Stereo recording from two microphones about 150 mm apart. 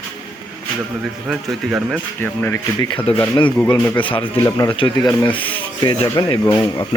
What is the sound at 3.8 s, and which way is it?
Speech, 10° left (ahead or behind).